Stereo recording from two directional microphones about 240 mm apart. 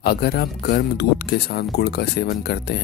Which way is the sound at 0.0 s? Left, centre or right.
Left.